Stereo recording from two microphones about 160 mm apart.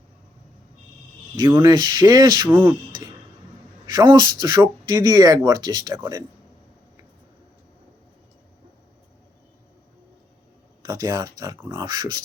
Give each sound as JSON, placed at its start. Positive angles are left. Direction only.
{"t": 1.5, "sound": "speech", "side_deg": -20}
{"t": 2.5, "sound": "speech", "side_deg": -15}
{"t": 3.8, "sound": "speech", "side_deg": -25}
{"t": 10.8, "sound": "speech", "side_deg": -25}